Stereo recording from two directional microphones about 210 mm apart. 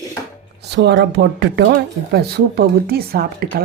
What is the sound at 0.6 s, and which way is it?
A woman's voice, 55° right (ahead or behind).